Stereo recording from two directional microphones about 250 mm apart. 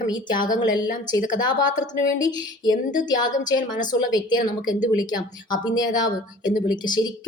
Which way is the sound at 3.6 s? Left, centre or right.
Left.